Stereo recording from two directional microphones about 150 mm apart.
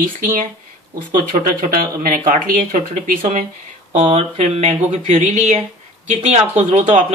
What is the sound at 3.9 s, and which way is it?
Speech, 40° right (ahead or behind).